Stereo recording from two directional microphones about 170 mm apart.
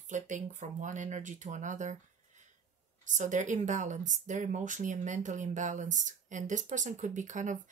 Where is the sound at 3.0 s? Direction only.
45° right (ahead or behind).